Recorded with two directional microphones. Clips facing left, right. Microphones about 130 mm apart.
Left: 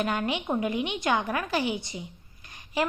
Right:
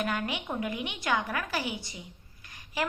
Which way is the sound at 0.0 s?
25° left (ahead or behind).